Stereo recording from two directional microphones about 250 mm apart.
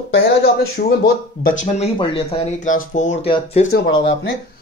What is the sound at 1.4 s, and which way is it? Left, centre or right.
Speech, left.